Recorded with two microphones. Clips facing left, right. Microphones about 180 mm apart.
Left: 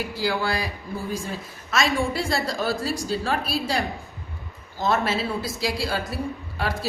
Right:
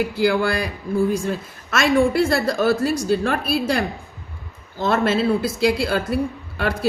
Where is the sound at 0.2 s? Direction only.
55° right (ahead or behind).